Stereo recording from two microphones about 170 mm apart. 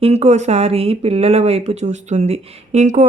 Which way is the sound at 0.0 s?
40° right (ahead or behind).